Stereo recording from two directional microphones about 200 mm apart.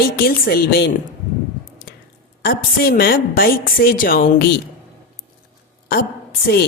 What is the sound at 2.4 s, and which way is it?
A woman's voice, 50° left (ahead or behind).